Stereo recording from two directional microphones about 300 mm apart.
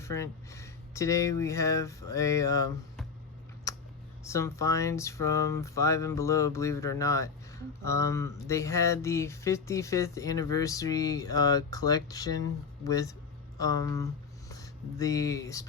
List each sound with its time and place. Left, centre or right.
0.0 s speech: centre
3.7 s a sound: centre
14.5 s speech: centre